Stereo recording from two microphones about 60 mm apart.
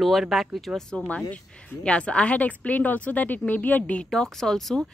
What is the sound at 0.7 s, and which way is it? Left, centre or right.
Speech, centre.